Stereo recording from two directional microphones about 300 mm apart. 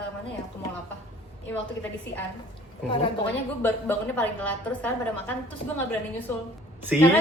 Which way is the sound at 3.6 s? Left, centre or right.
Centre.